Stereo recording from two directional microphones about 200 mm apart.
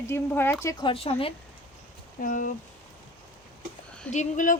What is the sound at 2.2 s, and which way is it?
Speech, 40° left (ahead or behind).